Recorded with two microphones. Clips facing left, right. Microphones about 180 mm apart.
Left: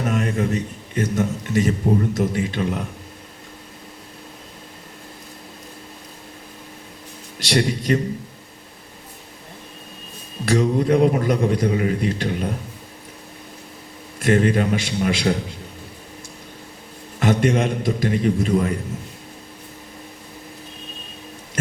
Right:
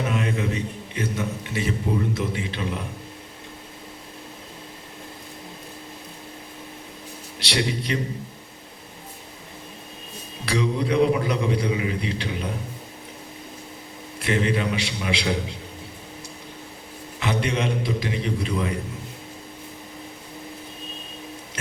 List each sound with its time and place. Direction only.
0.0 s a man's voice: 45° left (ahead or behind)
7.3 s a man's voice: 45° left (ahead or behind)
10.4 s a man's voice: 50° left (ahead or behind)
14.2 s a man's voice: 50° left (ahead or behind)
17.2 s a man's voice: 50° left (ahead or behind)